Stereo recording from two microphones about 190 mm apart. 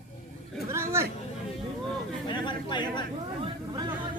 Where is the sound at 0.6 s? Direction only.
15° right (ahead or behind).